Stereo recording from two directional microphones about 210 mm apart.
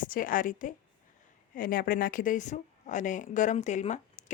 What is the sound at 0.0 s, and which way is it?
A woman's voice, 40° left (ahead or behind).